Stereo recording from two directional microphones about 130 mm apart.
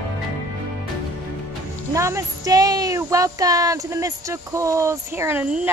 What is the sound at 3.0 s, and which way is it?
Speech, 25° right (ahead or behind).